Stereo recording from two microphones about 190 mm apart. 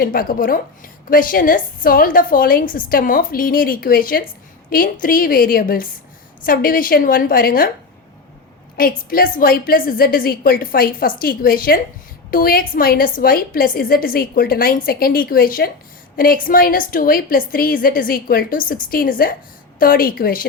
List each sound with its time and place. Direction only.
0.0 s a woman's voice: 50° left (ahead or behind)
8.8 s a woman's voice: 50° left (ahead or behind)